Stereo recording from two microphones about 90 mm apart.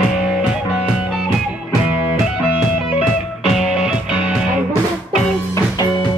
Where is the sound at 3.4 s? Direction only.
Centre (ahead or behind).